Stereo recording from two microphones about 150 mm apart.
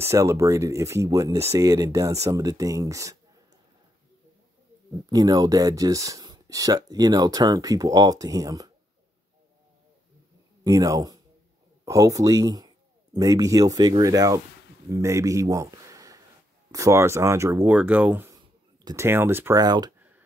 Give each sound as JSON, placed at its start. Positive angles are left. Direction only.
{"t": 0.0, "sound": "speech", "side_deg": -20}
{"t": 5.1, "sound": "speech", "side_deg": -25}
{"t": 10.6, "sound": "a man's voice", "side_deg": -25}
{"t": 19.6, "sound": "speech", "side_deg": -25}
{"t": 20.0, "sound": "a sound", "side_deg": -10}